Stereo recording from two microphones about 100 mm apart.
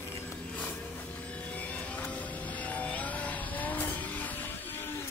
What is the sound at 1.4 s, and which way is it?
Vehicle, 15° left (ahead or behind).